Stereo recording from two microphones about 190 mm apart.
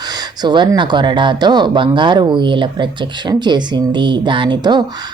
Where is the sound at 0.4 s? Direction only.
25° right (ahead or behind).